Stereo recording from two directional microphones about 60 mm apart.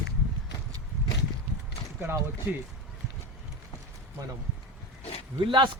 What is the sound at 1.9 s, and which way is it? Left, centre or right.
Speech, right.